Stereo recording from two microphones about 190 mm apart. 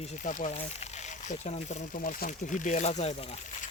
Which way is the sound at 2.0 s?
50° left (ahead or behind).